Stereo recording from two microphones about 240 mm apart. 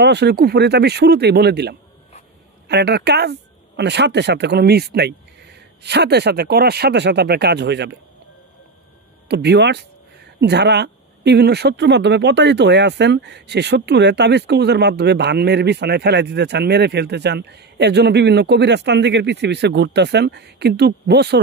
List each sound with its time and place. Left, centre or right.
0.0 s speech: right
9.3 s speech: right